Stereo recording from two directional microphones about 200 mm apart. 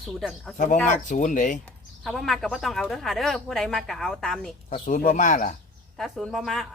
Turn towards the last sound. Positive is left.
turn(degrees=0)  # may be behind; listen again after turning